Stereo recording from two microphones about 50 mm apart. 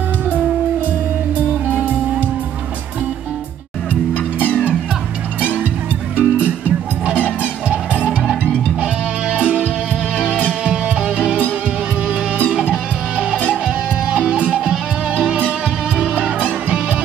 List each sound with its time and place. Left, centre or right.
1.7 s music: right
3.9 s music: left
6.1 s music: right
12.7 s music: right